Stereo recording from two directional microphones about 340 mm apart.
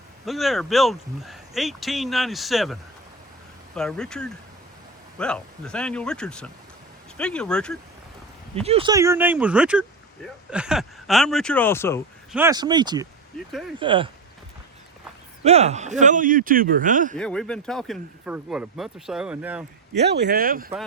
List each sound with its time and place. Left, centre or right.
0.3 s speech: centre
3.8 s speech: centre
8.5 s speech: centre
12.4 s speech: centre
13.3 s speech: centre
13.7 s speech: centre
15.4 s a man's voice: centre
17.2 s speech: centre
20.0 s a man's voice: right